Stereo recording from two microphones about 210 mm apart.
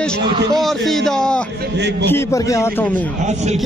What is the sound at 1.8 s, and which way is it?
Speech, 55° right (ahead or behind).